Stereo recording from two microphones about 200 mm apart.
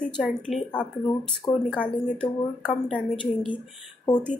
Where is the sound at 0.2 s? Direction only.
Centre (ahead or behind).